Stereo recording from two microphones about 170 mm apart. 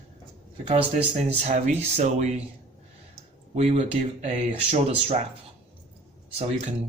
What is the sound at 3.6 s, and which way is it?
Speech, 40° right (ahead or behind).